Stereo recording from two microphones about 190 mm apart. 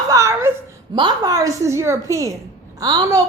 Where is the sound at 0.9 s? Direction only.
20° right (ahead or behind).